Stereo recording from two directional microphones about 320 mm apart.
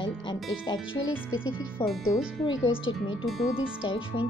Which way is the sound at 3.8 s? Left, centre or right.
Centre.